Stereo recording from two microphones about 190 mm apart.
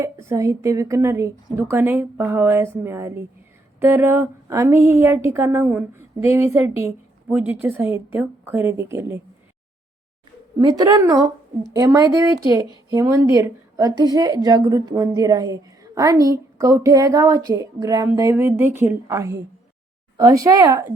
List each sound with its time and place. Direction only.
0.0 s a woman's voice: 15° right (ahead or behind)
10.6 s a woman's voice: 20° right (ahead or behind)